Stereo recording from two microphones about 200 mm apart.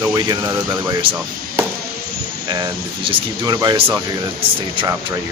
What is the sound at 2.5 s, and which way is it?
Speech, 20° right (ahead or behind).